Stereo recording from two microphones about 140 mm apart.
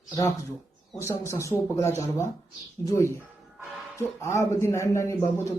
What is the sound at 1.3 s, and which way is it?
Speech, 20° left (ahead or behind).